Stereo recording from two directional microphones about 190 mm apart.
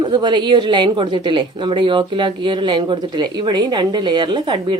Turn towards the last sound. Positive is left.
turn(degrees=-25)  # may be behind; listen again after turning